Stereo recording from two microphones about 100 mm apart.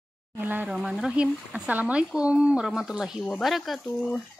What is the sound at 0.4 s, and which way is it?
Speech, 15° right (ahead or behind).